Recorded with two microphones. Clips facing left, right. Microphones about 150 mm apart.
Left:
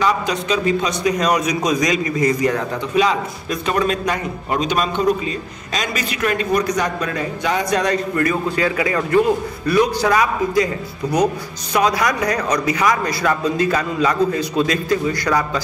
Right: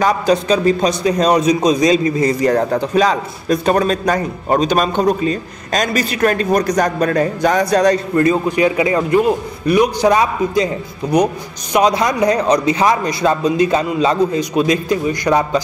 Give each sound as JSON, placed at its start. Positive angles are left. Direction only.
{"t": 0.0, "sound": "a man's voice", "side_deg": -35}
{"t": 8.2, "sound": "a man's voice", "side_deg": -20}